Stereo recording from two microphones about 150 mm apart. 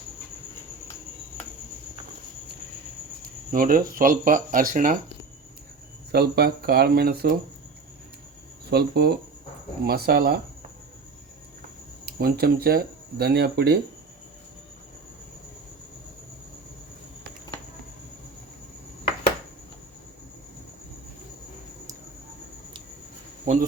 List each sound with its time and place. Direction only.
3.5 s speech: 70° right (ahead or behind)
6.1 s speech: 90° right
8.7 s speech: 90° right
12.0 s speech: 90° right